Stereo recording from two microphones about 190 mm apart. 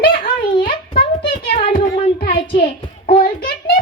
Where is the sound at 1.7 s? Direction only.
50° left (ahead or behind).